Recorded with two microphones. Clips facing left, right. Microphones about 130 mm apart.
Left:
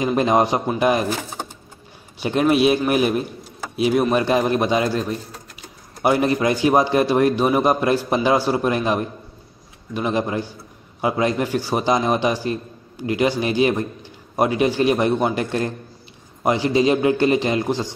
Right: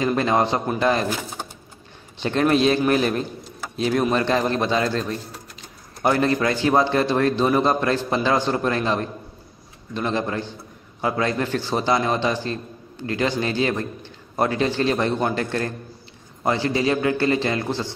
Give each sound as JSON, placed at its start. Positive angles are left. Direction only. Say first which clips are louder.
{"t": 0.0, "sound": "a man's voice", "louder": "left 2 dB", "side_deg": 15}
{"t": 2.1, "sound": "a man's voice", "louder": "left 2 dB", "side_deg": 10}
{"t": 6.0, "sound": "a man's voice", "louder": "left 2 dB", "side_deg": 15}